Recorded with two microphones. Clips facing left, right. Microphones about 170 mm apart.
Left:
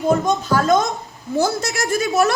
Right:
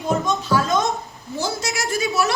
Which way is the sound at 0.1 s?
50° left (ahead or behind).